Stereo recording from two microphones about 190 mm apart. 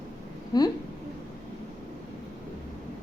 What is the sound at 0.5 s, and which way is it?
Speech, 20° left (ahead or behind).